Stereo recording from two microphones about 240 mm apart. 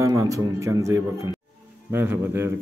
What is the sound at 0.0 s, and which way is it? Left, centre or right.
A man's voice, centre.